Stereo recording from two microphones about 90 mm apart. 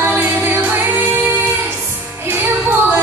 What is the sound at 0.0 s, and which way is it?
Music, 20° right (ahead or behind).